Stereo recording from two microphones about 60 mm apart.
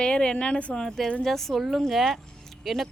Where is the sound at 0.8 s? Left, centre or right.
Centre.